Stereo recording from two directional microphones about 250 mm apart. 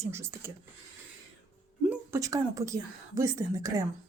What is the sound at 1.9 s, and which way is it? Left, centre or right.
Speech, centre.